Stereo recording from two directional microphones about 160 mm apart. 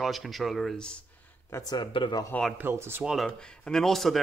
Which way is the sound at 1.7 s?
30° left (ahead or behind).